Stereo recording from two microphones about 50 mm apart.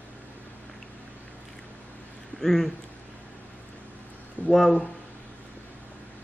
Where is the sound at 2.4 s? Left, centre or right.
Centre.